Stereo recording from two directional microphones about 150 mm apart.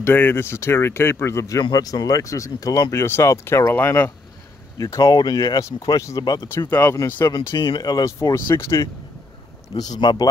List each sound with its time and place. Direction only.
0.0 s speech: 15° left (ahead or behind)
6.7 s speech: 15° left (ahead or behind)
7.3 s speech: 30° left (ahead or behind)
9.8 s speech: 30° left (ahead or behind)